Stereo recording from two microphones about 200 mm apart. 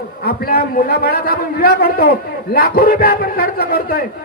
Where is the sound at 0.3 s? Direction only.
50° left (ahead or behind).